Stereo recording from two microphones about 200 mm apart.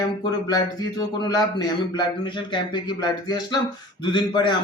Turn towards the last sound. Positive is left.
turn(degrees=20)  # may be behind; listen again after turning